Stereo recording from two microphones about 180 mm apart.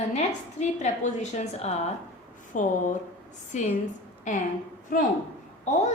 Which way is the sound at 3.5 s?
40° left (ahead or behind).